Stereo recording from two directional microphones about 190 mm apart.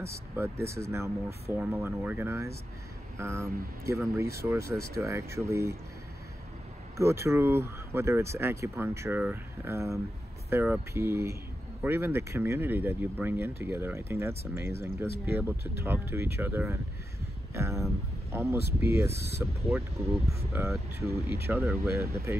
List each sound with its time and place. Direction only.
0.0 s speech: 15° right (ahead or behind)
7.0 s speech: 15° right (ahead or behind)
15.5 s speech: 60° left (ahead or behind)
15.8 s speech: 10° right (ahead or behind)